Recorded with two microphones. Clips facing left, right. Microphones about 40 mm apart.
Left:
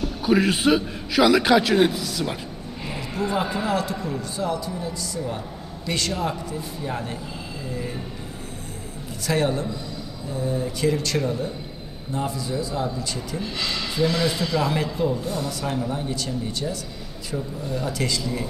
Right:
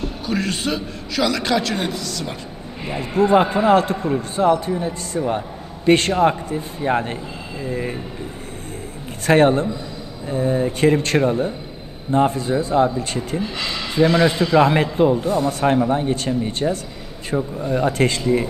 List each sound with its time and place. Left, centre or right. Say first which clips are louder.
0.3 s a man's voice: left 5 dB; centre
3.0 s a man's voice: right 10 dB; right
9.2 s a man's voice: right 9 dB; right
13.4 s speech: right 3 dB; centre
13.9 s a man's voice: right 8 dB; right
15.2 s speech: right 8 dB; right
15.6 s a man's voice: right 9 dB; right